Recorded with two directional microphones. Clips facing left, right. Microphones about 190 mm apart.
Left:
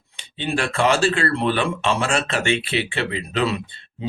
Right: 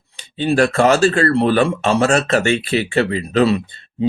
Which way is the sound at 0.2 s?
40° right (ahead or behind).